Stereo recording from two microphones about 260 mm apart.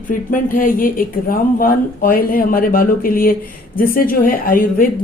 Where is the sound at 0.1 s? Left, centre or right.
Left.